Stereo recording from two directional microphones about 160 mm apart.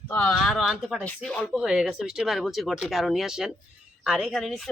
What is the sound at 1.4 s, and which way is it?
Speech, 5° right (ahead or behind).